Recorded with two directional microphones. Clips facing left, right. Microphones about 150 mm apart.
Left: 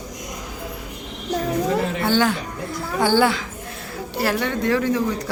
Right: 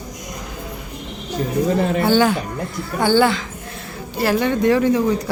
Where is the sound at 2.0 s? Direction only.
5° right (ahead or behind).